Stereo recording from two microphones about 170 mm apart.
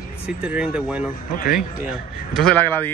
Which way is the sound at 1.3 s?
55° left (ahead or behind).